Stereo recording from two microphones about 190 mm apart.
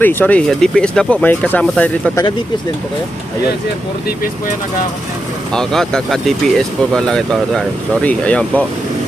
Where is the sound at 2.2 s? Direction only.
25° left (ahead or behind).